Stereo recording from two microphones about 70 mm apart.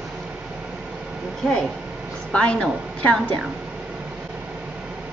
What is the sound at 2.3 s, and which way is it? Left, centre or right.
Speech, centre.